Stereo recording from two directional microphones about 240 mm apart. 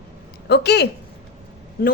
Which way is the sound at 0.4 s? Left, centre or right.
Left.